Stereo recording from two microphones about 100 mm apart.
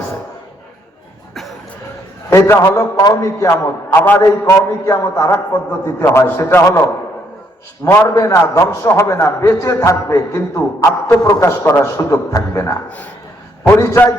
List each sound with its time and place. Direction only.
1.3 s a sound: centre (ahead or behind)
2.3 s a man's voice: 25° left (ahead or behind)
7.9 s a man's voice: 30° left (ahead or behind)